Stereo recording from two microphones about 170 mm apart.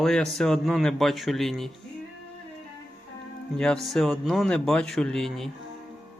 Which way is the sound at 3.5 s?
5° left (ahead or behind).